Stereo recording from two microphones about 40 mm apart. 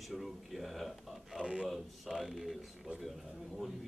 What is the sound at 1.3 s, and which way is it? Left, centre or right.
Speech, right.